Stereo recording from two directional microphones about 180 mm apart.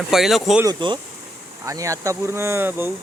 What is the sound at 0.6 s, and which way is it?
Speech, 25° right (ahead or behind).